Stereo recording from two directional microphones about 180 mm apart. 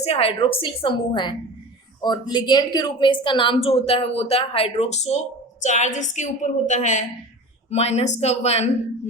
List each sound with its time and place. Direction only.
0.0 s a woman's voice: 35° left (ahead or behind)